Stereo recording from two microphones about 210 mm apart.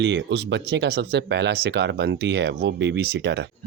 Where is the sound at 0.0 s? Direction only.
55° right (ahead or behind).